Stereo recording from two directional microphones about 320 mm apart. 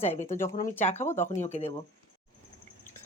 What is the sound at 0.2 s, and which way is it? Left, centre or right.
Speech, left.